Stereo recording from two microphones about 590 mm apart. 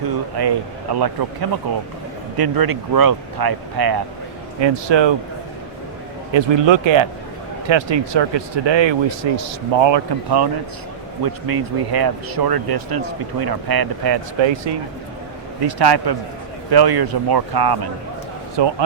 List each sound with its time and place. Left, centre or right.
0.3 s speech: right
6.3 s speech: right